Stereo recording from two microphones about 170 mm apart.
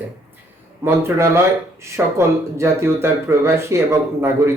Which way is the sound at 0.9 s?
15° right (ahead or behind).